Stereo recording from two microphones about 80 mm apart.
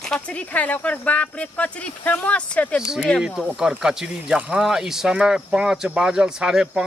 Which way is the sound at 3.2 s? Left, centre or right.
Centre.